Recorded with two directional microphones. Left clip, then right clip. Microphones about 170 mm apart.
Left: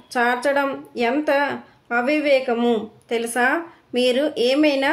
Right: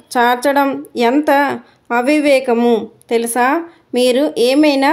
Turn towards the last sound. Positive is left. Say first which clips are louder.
# right 6 dB
turn(degrees=-40)  # may be behind; listen again after turning